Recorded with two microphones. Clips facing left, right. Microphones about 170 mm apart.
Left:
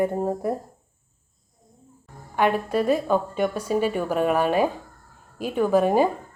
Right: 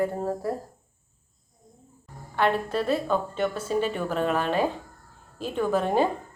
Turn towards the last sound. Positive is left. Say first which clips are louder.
# left 4 dB
turn(degrees=10)  # may be behind; listen again after turning